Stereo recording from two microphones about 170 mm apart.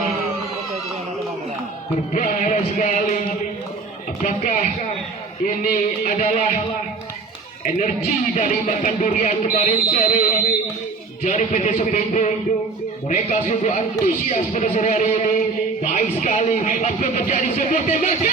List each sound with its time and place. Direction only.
2.1 s speech: 45° left (ahead or behind)
4.2 s speech: 45° left (ahead or behind)
8.4 s speech: 45° left (ahead or behind)